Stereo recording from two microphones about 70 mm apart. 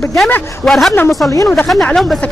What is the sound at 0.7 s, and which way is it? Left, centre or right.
Speech, centre.